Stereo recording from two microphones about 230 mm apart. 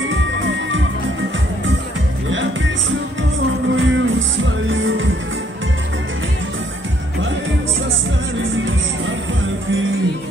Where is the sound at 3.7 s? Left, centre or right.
Right.